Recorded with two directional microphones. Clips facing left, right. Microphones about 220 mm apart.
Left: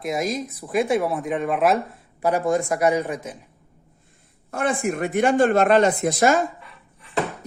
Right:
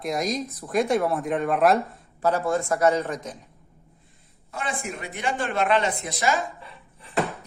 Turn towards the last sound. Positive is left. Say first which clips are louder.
# right 2 dB
turn(degrees=-30)  # may be behind; listen again after turning